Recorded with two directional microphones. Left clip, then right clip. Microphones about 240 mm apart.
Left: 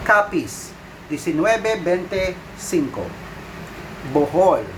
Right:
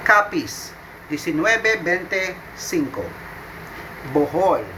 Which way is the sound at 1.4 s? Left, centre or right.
Centre.